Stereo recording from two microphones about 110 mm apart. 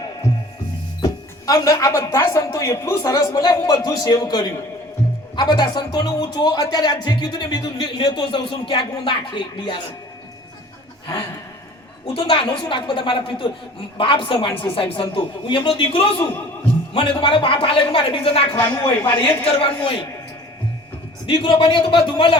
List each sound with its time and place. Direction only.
1.0 s speech: 35° left (ahead or behind)
12.1 s speech: 55° left (ahead or behind)
18.5 s speech: 20° left (ahead or behind)
19.5 s speech: 55° left (ahead or behind)
21.2 s speech: 50° left (ahead or behind)